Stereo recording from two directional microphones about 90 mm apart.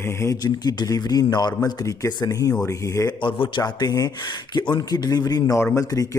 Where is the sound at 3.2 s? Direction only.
75° left (ahead or behind).